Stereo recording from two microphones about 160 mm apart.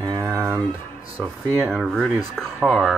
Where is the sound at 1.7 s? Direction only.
Centre (ahead or behind).